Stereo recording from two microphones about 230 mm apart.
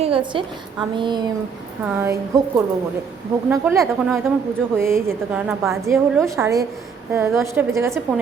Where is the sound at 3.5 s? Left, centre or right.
Centre.